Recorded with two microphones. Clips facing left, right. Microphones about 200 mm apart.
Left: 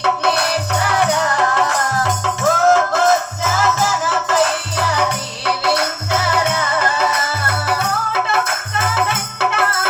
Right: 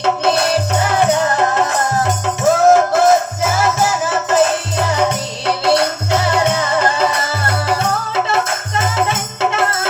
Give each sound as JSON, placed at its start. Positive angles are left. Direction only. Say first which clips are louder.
{"t": 0.0, "sound": "music", "louder": "right 3 dB", "side_deg": -25}